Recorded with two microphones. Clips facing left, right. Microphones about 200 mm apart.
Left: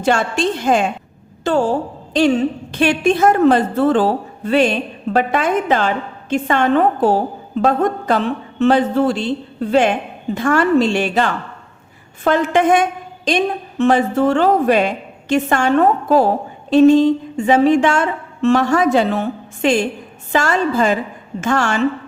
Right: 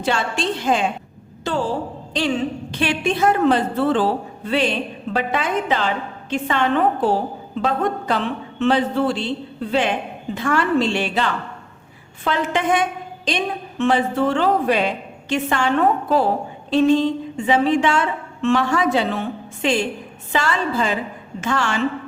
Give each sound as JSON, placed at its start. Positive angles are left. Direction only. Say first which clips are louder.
{"t": 0.0, "sound": "a woman's voice", "louder": "left 5 dB", "side_deg": 45}
{"t": 2.7, "sound": "a woman's voice", "louder": "left 6 dB", "side_deg": 45}